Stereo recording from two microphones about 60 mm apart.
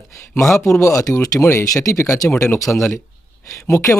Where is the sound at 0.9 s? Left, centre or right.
Left.